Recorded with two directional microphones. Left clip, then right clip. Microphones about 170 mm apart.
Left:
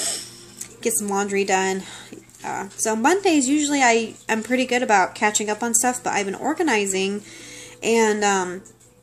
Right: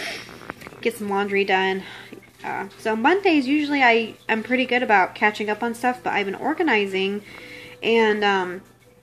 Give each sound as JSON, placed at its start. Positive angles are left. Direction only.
{"t": 0.8, "sound": "speech", "side_deg": 15}